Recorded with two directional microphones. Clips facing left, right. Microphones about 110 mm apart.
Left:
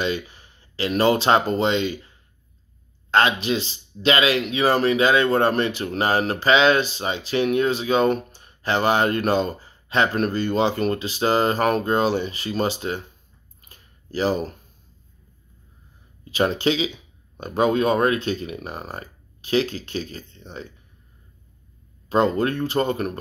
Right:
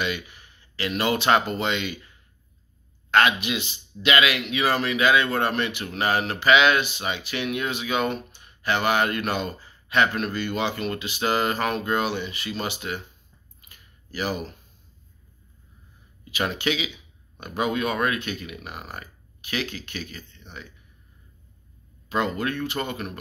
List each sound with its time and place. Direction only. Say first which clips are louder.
0.0 s speech: left 4 dB; 30° left (ahead or behind)
13.6 s a sound: left 3 dB; 35° left (ahead or behind)
16.3 s speech: left 6 dB; 35° left (ahead or behind)
22.1 s speech: left 6 dB; 35° left (ahead or behind)